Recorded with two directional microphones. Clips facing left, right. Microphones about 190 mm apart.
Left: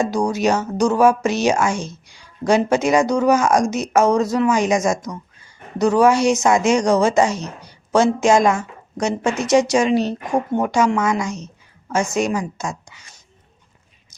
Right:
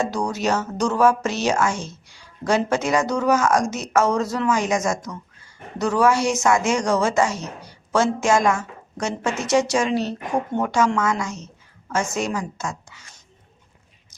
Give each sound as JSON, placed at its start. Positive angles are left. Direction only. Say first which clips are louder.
{"t": 0.0, "sound": "speech", "louder": "left 5 dB", "side_deg": 10}